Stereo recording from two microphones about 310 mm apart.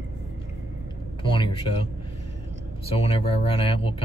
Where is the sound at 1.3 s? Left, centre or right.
Centre.